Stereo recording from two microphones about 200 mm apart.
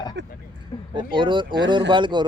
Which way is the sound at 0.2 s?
60° right (ahead or behind).